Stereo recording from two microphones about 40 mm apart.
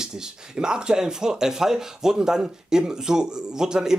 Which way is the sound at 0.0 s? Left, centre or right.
Centre.